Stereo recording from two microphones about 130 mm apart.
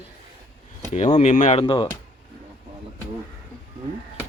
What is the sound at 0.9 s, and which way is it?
Speech, 60° left (ahead or behind).